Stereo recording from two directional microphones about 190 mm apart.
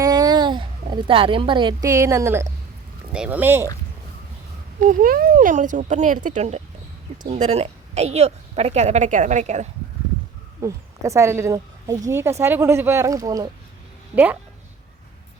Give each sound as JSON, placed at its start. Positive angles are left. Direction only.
{"t": 0.0, "sound": "a woman's voice", "side_deg": -20}
{"t": 4.8, "sound": "a woman's voice", "side_deg": -45}
{"t": 10.6, "sound": "a woman's voice", "side_deg": -15}